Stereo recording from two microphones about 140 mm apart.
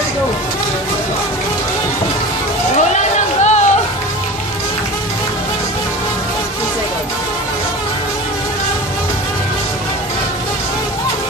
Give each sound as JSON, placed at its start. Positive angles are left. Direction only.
{"t": 3.4, "sound": "music", "side_deg": 55}